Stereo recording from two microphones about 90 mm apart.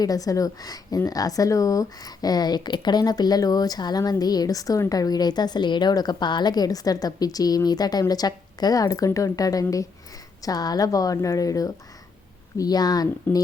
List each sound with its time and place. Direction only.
0.0 s a woman's voice: 40° left (ahead or behind)